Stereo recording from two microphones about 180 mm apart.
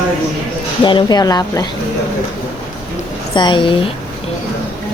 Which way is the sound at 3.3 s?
25° left (ahead or behind).